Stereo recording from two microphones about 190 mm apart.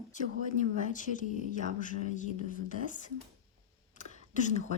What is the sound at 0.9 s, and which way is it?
Speech, 40° left (ahead or behind).